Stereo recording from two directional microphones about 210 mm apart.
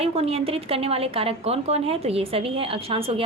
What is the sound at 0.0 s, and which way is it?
A woman's voice, 30° right (ahead or behind).